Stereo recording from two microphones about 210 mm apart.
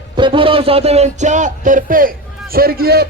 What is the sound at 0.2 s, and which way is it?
A man's voice, 25° right (ahead or behind).